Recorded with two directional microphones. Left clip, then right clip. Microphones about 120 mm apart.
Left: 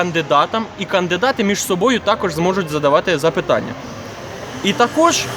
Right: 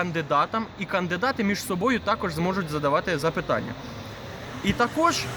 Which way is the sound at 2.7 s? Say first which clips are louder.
Left 9 dB; 35° left (ahead or behind).